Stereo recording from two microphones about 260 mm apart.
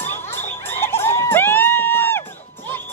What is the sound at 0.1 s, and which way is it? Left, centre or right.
Music, centre.